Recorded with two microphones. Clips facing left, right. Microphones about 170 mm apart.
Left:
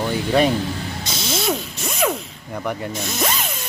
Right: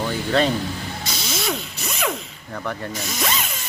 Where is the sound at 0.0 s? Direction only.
15° left (ahead or behind).